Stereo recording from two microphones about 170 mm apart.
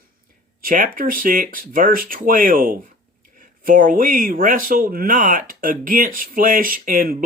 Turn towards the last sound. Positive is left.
turn(degrees=-55)  # may be behind; listen again after turning